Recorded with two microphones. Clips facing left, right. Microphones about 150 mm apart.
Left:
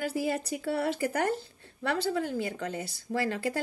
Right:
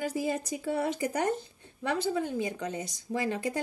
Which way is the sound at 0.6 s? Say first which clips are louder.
Left 1 dB; 15° right (ahead or behind).